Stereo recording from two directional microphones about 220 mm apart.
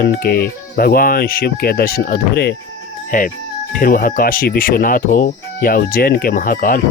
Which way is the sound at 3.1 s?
40° left (ahead or behind).